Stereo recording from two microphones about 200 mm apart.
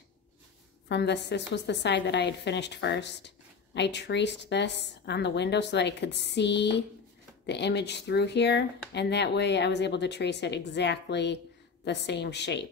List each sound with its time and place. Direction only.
0.8 s a woman's voice: 60° left (ahead or behind)